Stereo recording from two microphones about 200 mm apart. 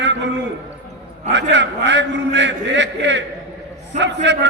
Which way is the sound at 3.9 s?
40° right (ahead or behind).